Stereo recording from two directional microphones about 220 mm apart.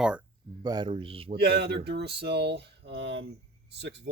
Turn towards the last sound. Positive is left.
turn(degrees=-50)  # may be behind; listen again after turning